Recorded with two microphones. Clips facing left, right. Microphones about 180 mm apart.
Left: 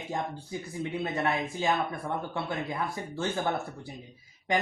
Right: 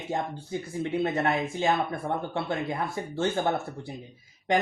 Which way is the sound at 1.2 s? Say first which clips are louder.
Right 3 dB; 30° right (ahead or behind).